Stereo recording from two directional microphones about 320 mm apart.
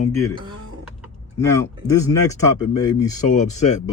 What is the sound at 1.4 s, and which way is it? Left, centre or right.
Speech, centre.